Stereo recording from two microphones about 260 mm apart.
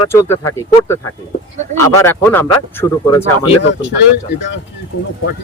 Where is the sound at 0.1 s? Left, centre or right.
Centre.